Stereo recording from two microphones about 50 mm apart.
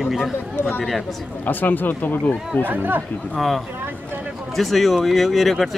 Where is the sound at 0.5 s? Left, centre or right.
Left.